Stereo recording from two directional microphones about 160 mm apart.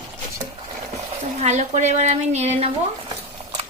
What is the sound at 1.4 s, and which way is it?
A woman's voice, 45° right (ahead or behind).